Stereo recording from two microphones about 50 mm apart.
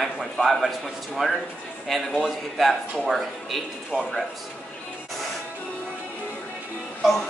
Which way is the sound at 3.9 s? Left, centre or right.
Right.